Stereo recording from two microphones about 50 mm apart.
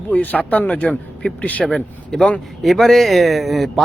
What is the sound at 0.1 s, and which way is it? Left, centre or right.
Speech, left.